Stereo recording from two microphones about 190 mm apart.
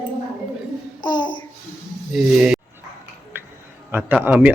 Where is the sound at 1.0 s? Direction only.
25° left (ahead or behind).